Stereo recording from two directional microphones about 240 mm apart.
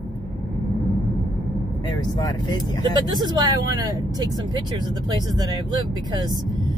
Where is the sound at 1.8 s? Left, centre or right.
Centre.